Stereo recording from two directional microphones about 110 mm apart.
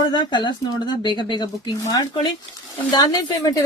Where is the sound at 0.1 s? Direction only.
45° left (ahead or behind).